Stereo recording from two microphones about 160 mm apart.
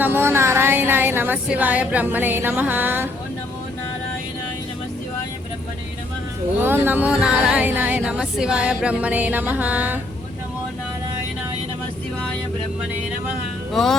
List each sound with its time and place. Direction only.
0.0 s music: 15° right (ahead or behind)
6.6 s music: 15° right (ahead or behind)